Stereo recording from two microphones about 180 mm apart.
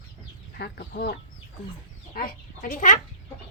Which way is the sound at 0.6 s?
60° left (ahead or behind).